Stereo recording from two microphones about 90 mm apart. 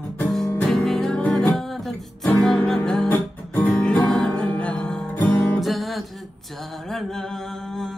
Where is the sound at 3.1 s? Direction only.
20° left (ahead or behind).